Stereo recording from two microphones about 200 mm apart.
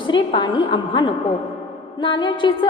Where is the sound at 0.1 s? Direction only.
25° left (ahead or behind).